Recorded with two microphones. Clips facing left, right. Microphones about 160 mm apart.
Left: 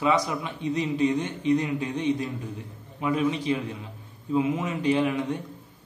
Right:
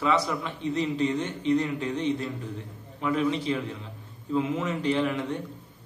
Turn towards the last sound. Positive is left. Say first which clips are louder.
# left 2 dB
turn(degrees=15)  # may be behind; listen again after turning